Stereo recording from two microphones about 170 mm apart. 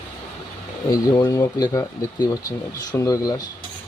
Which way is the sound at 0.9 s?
20° left (ahead or behind).